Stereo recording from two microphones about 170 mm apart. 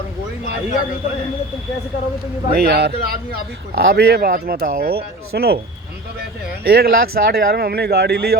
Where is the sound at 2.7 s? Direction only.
70° right (ahead or behind).